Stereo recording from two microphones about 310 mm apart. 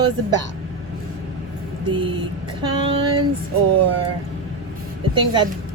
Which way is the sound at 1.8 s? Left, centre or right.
Centre.